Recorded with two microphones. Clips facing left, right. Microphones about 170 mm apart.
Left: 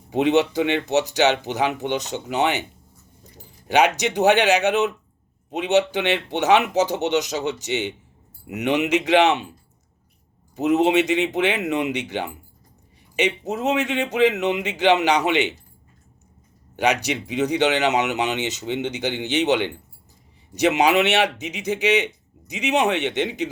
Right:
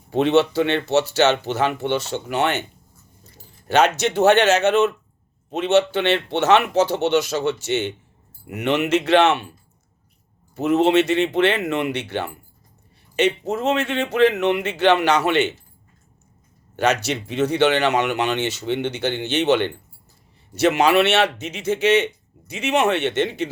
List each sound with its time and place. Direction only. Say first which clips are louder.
0.1 s speech: right 1 dB; 15° left (ahead or behind)
10.5 s speech: right 1 dB; 15° left (ahead or behind)
16.7 s speech: right 1 dB; 15° left (ahead or behind)